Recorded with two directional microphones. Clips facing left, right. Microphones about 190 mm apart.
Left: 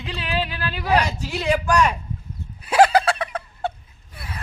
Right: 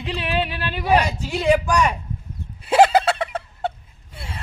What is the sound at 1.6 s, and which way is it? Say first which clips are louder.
Speech: left 1 dB; 10° right (ahead or behind).